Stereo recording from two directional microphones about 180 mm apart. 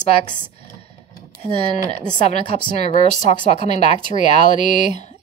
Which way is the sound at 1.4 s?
25° right (ahead or behind).